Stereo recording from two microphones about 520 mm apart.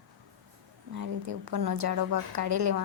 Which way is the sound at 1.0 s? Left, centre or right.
Right.